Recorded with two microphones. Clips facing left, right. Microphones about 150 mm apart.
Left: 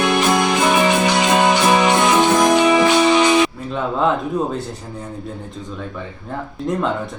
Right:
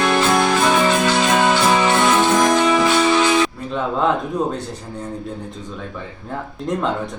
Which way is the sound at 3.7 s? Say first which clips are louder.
Even; centre (ahead or behind).